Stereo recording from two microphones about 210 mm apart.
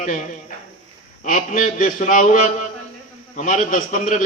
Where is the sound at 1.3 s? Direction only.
40° left (ahead or behind).